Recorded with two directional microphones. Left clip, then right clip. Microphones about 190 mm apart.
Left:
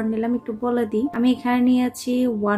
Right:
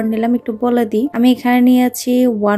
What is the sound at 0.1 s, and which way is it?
A woman's voice, 40° right (ahead or behind).